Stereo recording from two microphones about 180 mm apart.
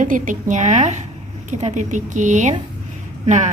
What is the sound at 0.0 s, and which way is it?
A woman's voice, 45° right (ahead or behind).